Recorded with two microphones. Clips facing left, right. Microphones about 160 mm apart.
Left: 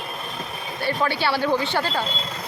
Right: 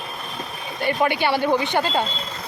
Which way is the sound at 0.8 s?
20° right (ahead or behind).